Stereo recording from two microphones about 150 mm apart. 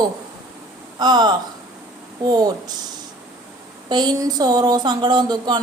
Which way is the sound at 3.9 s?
30° right (ahead or behind).